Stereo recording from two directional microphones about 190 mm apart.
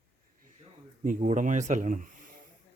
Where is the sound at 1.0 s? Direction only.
40° right (ahead or behind).